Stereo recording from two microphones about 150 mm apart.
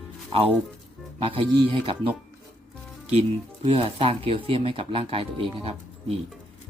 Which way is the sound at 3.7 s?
40° right (ahead or behind).